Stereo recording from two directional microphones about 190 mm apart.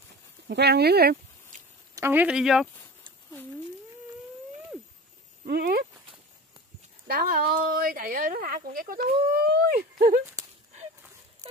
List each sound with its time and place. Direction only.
0.5 s speech: 60° right (ahead or behind)
2.0 s speech: 10° right (ahead or behind)
5.5 s speech: 55° right (ahead or behind)
7.1 s speech: 50° right (ahead or behind)